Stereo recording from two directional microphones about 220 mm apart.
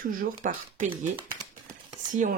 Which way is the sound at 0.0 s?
40° right (ahead or behind).